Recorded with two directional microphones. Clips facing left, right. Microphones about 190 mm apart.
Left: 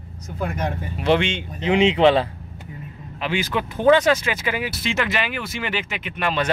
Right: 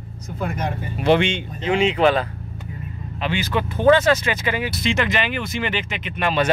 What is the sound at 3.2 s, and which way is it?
Speech, 10° left (ahead or behind).